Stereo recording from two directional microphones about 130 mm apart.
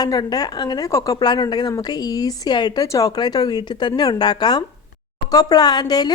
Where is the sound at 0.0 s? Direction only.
30° left (ahead or behind).